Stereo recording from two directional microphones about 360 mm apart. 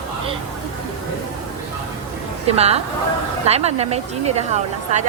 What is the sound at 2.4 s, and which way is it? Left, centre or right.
Speech, centre.